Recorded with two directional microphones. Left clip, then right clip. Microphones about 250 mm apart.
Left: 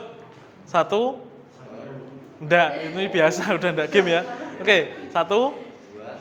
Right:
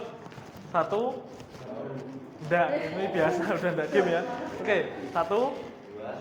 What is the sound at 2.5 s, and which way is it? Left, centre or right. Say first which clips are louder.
A man's voice: left 6 dB; left.